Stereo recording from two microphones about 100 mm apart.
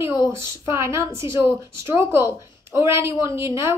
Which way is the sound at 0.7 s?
30° right (ahead or behind).